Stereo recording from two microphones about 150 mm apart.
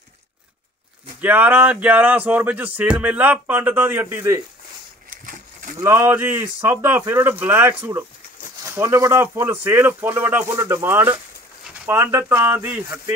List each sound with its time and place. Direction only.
1.2 s speech: 10° right (ahead or behind)
5.8 s speech: 15° right (ahead or behind)